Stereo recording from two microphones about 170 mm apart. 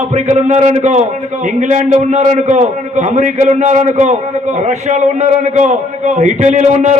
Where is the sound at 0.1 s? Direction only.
45° right (ahead or behind).